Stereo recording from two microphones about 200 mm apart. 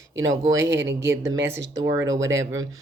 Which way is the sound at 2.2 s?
70° right (ahead or behind).